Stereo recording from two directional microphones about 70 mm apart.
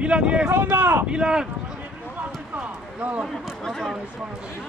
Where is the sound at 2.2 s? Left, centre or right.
Right.